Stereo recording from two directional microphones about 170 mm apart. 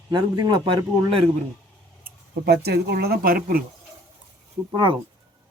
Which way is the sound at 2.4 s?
75° right (ahead or behind).